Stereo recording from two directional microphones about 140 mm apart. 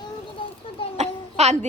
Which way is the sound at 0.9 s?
50° right (ahead or behind).